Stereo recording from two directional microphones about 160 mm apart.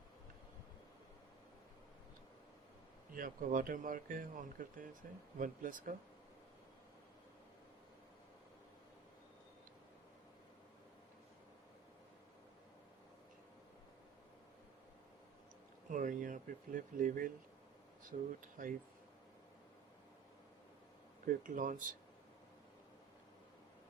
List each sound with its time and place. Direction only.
3.2 s speech: 60° right (ahead or behind)
15.9 s speech: 55° right (ahead or behind)
21.2 s speech: 55° right (ahead or behind)